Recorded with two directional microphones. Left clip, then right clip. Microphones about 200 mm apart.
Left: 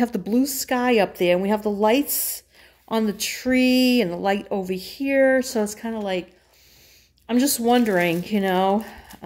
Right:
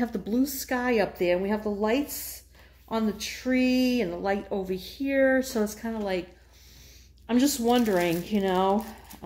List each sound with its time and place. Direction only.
0.0 s speech: 50° left (ahead or behind)
7.2 s speech: 25° left (ahead or behind)